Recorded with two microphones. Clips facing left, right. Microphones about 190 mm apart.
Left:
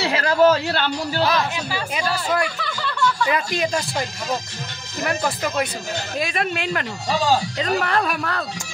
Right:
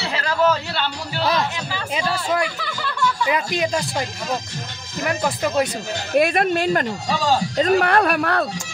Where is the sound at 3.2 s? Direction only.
15° right (ahead or behind).